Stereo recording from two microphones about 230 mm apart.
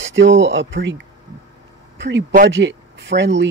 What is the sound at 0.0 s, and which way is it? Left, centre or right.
Speech, right.